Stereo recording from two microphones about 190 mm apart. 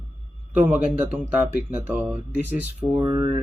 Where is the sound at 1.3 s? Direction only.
10° right (ahead or behind).